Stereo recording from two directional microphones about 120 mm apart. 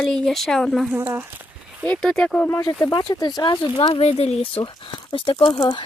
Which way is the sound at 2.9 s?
35° left (ahead or behind).